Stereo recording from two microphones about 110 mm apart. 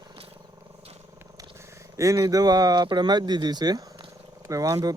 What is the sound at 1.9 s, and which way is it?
Speech, 30° right (ahead or behind).